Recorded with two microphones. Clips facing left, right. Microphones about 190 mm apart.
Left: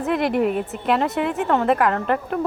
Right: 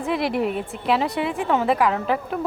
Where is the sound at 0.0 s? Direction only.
Centre (ahead or behind).